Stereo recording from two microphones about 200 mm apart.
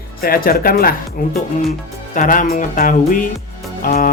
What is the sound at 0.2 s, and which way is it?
Speech, 50° left (ahead or behind).